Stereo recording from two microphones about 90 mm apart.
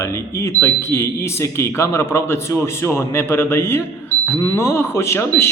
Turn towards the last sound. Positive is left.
turn(degrees=30)  # may be behind; listen again after turning